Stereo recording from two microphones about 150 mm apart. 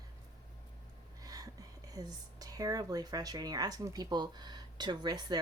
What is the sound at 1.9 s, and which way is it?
Speech, 25° right (ahead or behind).